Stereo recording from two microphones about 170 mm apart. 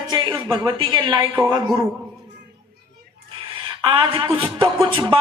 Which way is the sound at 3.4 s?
30° right (ahead or behind).